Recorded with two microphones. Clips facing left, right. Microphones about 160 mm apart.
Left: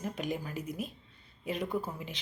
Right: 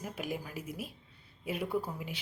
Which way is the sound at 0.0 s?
10° right (ahead or behind).